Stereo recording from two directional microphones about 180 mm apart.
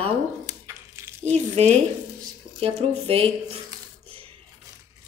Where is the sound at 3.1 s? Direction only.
35° right (ahead or behind).